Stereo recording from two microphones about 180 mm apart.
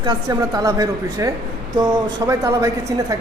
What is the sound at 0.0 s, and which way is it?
A woman's voice, 20° right (ahead or behind).